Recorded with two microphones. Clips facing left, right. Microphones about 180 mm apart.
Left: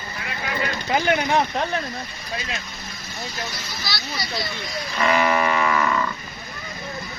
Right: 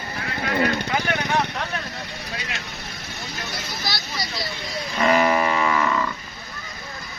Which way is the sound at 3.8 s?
45° right (ahead or behind).